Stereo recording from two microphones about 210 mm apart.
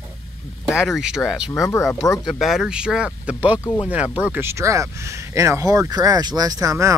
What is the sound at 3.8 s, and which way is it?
Speech, 5° right (ahead or behind).